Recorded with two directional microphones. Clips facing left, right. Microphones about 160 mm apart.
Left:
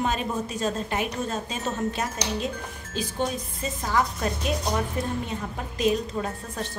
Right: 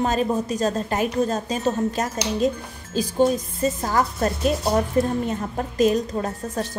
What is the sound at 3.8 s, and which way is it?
Speech, 40° right (ahead or behind).